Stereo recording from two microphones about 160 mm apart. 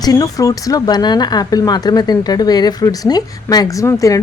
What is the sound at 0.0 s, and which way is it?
Speech, 25° left (ahead or behind).